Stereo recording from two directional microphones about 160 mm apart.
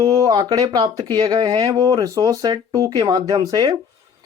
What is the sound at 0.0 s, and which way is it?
Speech, 25° right (ahead or behind).